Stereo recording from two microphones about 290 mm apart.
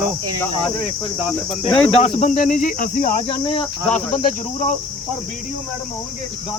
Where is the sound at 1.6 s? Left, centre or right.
Centre.